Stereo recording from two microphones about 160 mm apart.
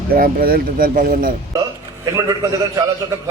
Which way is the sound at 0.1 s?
65° right (ahead or behind).